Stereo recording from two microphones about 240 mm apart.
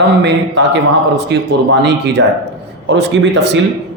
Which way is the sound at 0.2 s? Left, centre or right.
Right.